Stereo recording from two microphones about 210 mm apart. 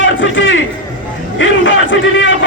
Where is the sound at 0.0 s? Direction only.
65° left (ahead or behind).